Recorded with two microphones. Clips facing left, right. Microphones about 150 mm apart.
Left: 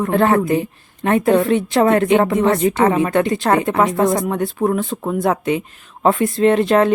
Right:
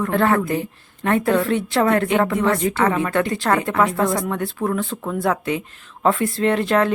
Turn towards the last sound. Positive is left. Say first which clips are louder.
# left 5 dB
turn(degrees=20)  # may be behind; listen again after turning